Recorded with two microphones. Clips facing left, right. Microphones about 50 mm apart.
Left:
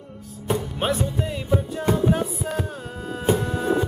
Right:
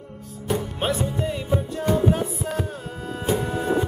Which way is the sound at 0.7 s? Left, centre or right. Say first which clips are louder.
Left 1 dB; centre.